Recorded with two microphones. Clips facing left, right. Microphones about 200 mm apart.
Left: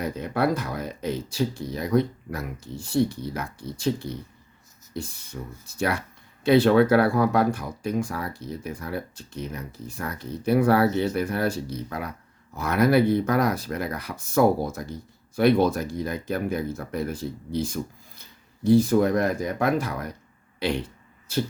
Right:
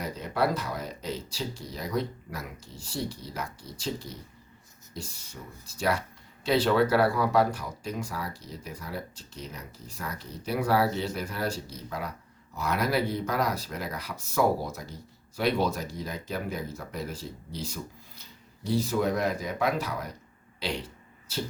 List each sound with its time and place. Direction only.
0.0 s speech: 55° left (ahead or behind)
5.3 s speech: 55° left (ahead or behind)